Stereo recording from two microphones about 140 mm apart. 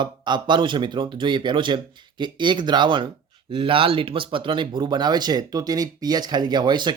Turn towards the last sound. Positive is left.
turn(degrees=-35)  # may be behind; listen again after turning